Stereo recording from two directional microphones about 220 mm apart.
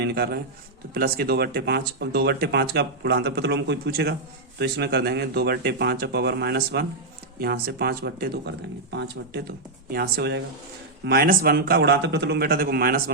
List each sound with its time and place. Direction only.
0.0 s speech: 45° right (ahead or behind)